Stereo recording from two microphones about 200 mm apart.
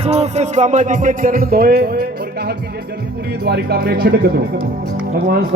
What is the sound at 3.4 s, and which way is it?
Speech, 50° right (ahead or behind).